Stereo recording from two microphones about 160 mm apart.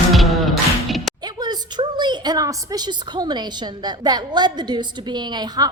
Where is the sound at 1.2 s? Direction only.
25° right (ahead or behind).